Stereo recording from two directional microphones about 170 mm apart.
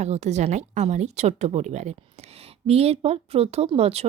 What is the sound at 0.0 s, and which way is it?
A woman's voice, 40° right (ahead or behind).